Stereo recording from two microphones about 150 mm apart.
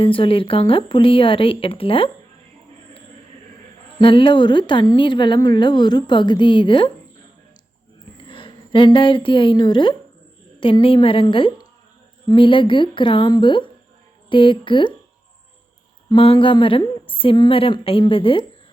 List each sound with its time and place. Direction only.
0.0 s speech: 35° left (ahead or behind)
4.0 s speech: 35° left (ahead or behind)
8.3 s a woman's voice: 35° left (ahead or behind)
16.0 s speech: 35° left (ahead or behind)